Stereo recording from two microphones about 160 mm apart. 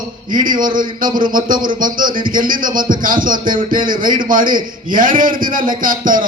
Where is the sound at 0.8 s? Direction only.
60° right (ahead or behind).